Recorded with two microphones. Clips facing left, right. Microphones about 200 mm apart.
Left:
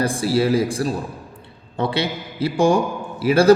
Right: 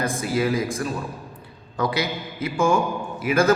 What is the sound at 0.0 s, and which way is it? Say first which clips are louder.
A man's voice: left 4 dB; 30° left (ahead or behind).